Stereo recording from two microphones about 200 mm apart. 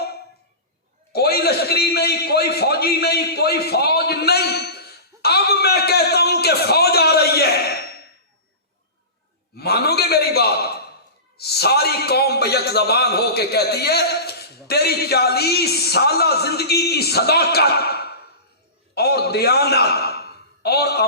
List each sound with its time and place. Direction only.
1.1 s a man's voice: 50° left (ahead or behind)
9.6 s a man's voice: 50° left (ahead or behind)